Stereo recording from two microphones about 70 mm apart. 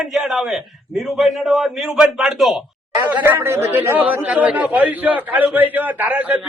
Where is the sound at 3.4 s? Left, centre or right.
Right.